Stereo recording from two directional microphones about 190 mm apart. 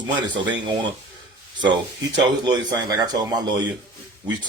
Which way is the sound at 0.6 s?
25° right (ahead or behind).